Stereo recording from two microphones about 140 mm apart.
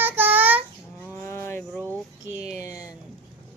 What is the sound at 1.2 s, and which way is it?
Cattle, 15° left (ahead or behind).